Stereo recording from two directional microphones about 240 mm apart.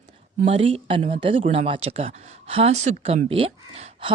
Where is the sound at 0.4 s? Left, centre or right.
Right.